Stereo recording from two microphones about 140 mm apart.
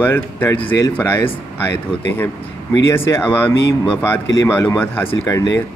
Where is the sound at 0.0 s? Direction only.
15° left (ahead or behind).